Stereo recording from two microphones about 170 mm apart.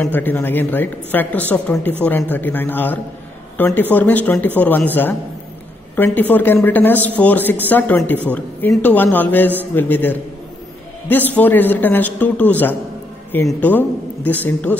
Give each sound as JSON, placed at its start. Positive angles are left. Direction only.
{"t": 0.0, "sound": "a man's voice", "side_deg": 10}